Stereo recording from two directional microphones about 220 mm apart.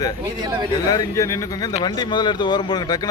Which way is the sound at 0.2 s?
20° right (ahead or behind).